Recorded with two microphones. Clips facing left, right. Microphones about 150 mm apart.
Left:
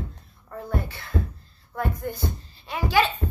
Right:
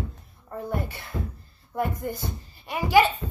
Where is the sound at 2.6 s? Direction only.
15° right (ahead or behind).